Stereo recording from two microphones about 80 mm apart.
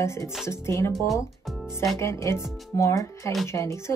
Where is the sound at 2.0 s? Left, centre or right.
Left.